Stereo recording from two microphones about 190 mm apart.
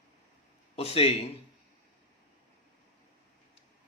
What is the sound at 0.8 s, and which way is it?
Speech, 30° left (ahead or behind).